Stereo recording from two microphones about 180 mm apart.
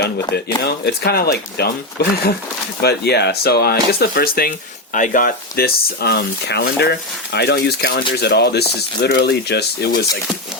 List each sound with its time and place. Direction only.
0.4 s speech: 65° left (ahead or behind)